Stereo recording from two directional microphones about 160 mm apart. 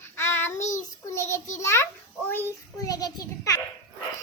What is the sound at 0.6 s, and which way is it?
Speech, 50° left (ahead or behind).